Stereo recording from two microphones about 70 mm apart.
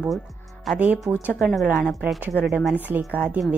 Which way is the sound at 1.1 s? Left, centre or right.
Left.